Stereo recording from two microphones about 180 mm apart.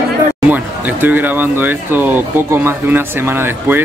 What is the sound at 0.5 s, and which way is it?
Speech, 10° right (ahead or behind).